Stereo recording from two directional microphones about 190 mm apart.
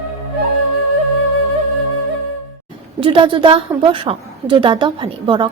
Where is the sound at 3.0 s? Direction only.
25° right (ahead or behind).